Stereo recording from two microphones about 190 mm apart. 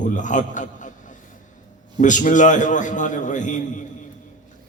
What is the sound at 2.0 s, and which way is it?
A man's voice, 40° left (ahead or behind).